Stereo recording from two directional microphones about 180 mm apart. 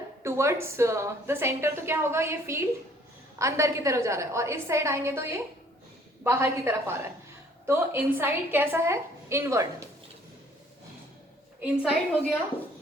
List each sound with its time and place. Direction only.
0.2 s a woman's voice: 15° right (ahead or behind)
11.6 s a woman's voice: 5° right (ahead or behind)